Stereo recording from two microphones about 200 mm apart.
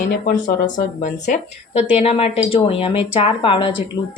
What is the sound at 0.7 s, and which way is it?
A woman's voice, 40° left (ahead or behind).